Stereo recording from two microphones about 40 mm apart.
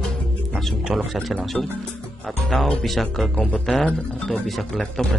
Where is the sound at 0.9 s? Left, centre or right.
Right.